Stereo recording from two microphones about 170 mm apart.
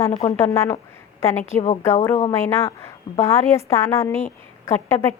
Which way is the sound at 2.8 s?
15° left (ahead or behind).